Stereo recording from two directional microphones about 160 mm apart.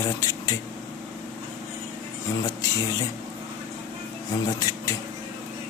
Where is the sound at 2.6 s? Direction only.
20° left (ahead or behind).